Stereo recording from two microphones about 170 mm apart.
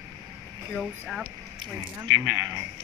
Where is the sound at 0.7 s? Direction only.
Centre (ahead or behind).